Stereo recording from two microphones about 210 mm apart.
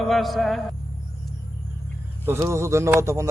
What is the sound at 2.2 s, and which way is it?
Speech, 10° right (ahead or behind).